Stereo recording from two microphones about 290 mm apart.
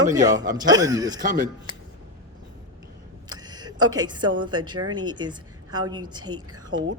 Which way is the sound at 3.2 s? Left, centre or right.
Centre.